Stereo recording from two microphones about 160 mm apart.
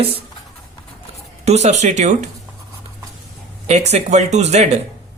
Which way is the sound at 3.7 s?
45° right (ahead or behind).